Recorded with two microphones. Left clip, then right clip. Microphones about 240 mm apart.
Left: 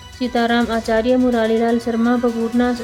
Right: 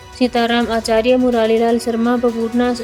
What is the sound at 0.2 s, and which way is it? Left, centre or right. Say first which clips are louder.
Speech: right 2 dB; right.